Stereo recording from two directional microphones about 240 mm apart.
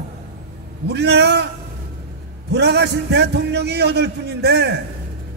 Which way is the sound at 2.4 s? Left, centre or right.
Right.